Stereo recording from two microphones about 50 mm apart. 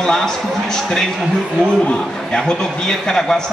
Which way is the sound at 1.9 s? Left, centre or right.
Centre.